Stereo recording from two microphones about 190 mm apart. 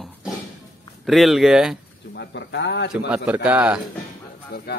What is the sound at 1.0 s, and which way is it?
Speech, centre (ahead or behind).